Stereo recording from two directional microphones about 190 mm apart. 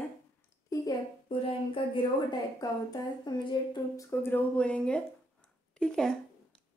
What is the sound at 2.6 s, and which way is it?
Speech, 20° left (ahead or behind).